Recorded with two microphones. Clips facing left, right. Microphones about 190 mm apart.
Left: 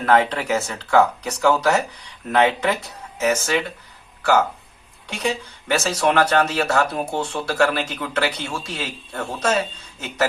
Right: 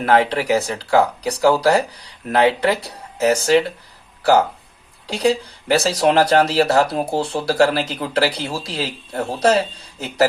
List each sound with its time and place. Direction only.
0.0 s speech: 35° right (ahead or behind)